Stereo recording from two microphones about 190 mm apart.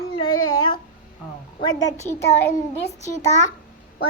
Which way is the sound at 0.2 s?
25° left (ahead or behind).